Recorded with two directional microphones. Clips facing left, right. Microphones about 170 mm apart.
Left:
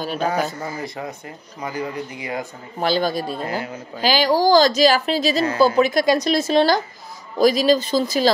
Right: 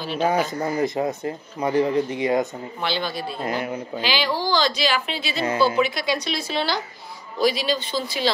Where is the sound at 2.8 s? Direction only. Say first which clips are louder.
Left 7 dB; 40° left (ahead or behind).